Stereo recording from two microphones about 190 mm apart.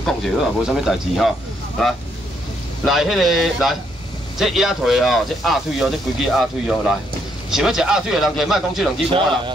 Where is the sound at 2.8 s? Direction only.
Centre (ahead or behind).